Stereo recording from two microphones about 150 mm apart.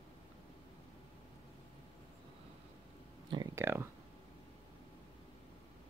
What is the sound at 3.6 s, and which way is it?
Speech, 15° right (ahead or behind).